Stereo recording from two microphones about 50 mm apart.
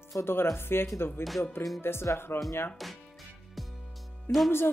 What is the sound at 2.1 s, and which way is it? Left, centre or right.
Speech, left.